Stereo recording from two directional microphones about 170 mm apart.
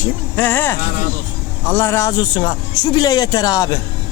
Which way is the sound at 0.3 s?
10° left (ahead or behind).